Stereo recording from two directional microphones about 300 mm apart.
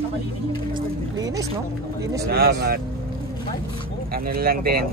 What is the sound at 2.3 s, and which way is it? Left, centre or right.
Speech, right.